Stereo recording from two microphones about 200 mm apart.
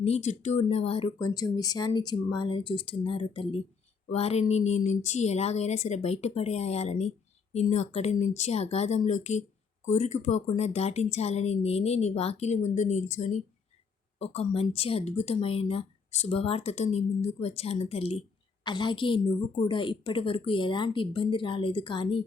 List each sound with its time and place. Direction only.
0.0 s speech: 35° left (ahead or behind)